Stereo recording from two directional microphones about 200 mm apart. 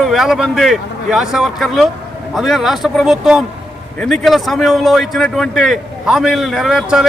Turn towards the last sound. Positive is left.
turn(degrees=0)  # may be behind; listen again after turning